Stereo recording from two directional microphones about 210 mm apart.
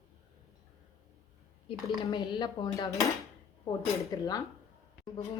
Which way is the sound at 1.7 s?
20° left (ahead or behind).